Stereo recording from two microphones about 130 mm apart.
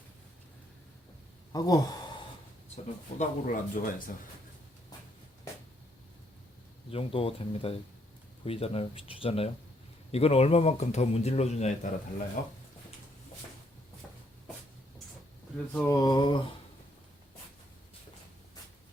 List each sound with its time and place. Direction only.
1.5 s speech: 30° left (ahead or behind)
3.2 s speech: 90° left
6.9 s a man's voice: 50° left (ahead or behind)
12.4 s speech: 90° left
15.5 s speech: 10° left (ahead or behind)
15.9 s a sound: 30° left (ahead or behind)